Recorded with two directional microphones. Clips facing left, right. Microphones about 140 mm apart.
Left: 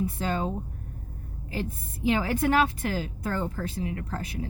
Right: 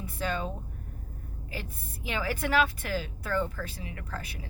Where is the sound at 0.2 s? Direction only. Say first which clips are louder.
Left 3 dB; 30° left (ahead or behind).